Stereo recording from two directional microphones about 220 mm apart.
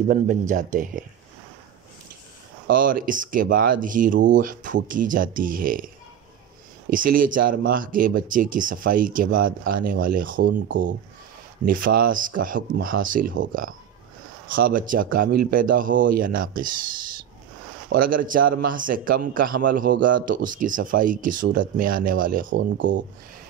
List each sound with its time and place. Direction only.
0.1 s speech: 35° right (ahead or behind)
2.8 s speech: 40° right (ahead or behind)
6.9 s speech: 40° right (ahead or behind)
11.6 s speech: 40° right (ahead or behind)
18.0 s speech: 40° right (ahead or behind)
22.6 s speech: 55° right (ahead or behind)